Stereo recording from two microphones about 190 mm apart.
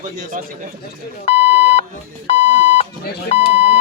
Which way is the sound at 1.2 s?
30° left (ahead or behind).